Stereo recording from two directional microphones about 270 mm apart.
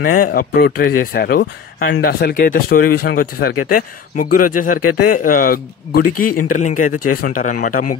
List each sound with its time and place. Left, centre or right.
0.0 s a man's voice: left